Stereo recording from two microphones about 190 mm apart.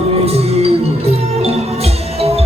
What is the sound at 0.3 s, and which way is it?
Music, 30° right (ahead or behind).